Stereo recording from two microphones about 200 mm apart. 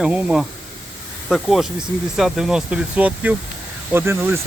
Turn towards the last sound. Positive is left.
turn(degrees=-10)  # may be behind; listen again after turning